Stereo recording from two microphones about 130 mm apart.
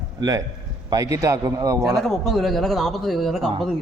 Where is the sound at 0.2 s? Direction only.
25° right (ahead or behind).